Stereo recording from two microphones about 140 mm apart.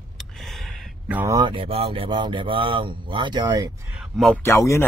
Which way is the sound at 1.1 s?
15° right (ahead or behind).